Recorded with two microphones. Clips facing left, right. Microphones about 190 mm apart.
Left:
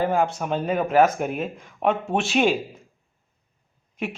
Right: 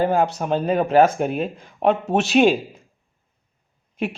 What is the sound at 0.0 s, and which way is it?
Speech, 35° right (ahead or behind).